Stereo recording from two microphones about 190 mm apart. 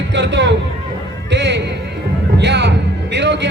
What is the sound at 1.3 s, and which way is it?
Music, 70° right (ahead or behind).